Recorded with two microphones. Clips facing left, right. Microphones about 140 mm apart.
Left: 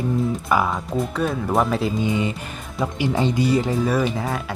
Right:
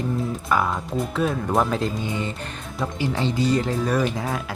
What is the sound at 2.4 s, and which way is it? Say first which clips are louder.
Speech: left 2 dB; 5° left (ahead or behind).